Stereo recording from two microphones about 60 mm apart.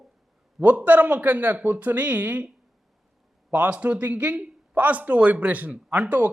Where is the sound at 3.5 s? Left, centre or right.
Right.